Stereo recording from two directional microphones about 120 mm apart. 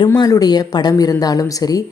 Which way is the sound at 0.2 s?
35° left (ahead or behind).